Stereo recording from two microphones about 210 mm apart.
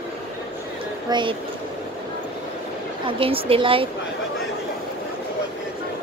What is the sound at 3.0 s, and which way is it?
Speech, 25° right (ahead or behind).